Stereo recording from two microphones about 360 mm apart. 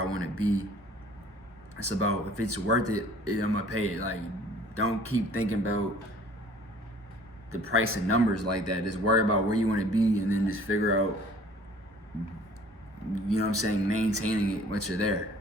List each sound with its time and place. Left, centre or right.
0.0 s a sound: right
1.7 s speech: right
7.5 s speech: right
13.1 s speech: right